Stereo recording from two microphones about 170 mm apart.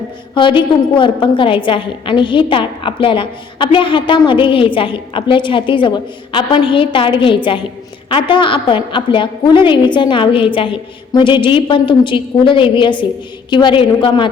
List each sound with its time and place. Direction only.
0.3 s a woman's voice: 30° left (ahead or behind)